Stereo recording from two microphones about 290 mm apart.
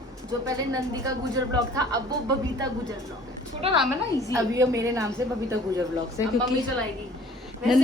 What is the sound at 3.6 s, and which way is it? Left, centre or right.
A woman's voice, right.